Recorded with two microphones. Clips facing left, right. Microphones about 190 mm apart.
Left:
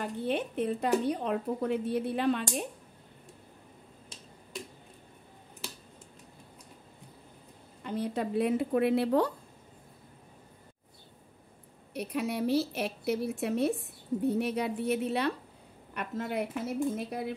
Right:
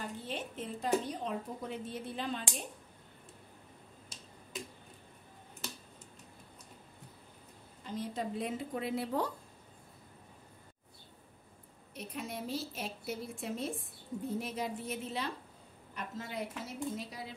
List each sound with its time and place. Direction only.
0.0 s speech: 60° left (ahead or behind)
7.8 s a woman's voice: 65° left (ahead or behind)
11.9 s a woman's voice: 70° left (ahead or behind)